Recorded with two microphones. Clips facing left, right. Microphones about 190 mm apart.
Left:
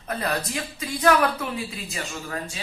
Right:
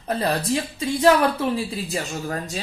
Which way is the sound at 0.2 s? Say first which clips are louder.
Right 5 dB; 30° right (ahead or behind).